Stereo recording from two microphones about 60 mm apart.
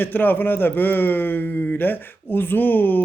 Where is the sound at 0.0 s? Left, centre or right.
Left.